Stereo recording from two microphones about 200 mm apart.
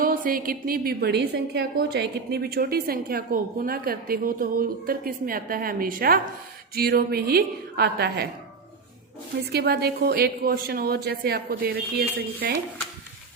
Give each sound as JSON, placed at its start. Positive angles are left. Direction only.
{"t": 0.1, "sound": "a woman's voice", "side_deg": -45}
{"t": 9.5, "sound": "a woman's voice", "side_deg": -50}